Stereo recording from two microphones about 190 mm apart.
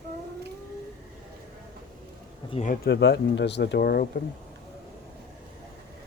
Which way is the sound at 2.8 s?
65° left (ahead or behind).